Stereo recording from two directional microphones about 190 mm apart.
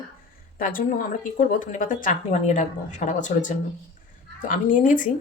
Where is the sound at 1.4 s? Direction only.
45° left (ahead or behind).